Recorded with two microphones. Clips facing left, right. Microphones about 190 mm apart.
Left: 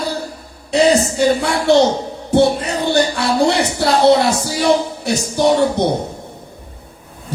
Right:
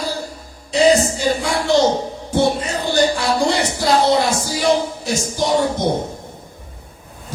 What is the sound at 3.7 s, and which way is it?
Music, 65° left (ahead or behind).